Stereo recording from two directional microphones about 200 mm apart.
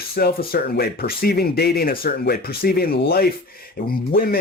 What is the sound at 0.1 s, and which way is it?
Speech, 50° left (ahead or behind).